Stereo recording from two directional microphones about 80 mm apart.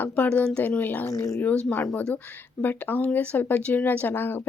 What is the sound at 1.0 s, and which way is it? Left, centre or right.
Speech, left.